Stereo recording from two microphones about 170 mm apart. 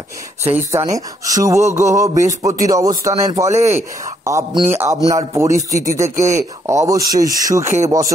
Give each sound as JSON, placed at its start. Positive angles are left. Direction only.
{"t": 0.5, "sound": "a man's voice", "side_deg": -15}